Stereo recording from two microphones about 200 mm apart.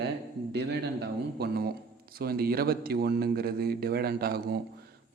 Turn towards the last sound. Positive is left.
turn(degrees=-50)  # may be behind; listen again after turning